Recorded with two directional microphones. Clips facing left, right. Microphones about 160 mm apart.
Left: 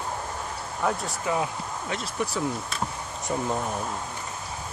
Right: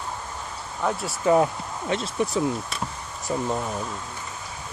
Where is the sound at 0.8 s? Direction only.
5° left (ahead or behind).